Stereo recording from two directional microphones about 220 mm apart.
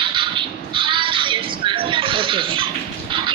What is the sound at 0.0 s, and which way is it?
Music, 20° right (ahead or behind).